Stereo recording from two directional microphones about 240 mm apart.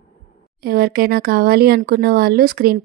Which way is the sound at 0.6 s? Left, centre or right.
Right.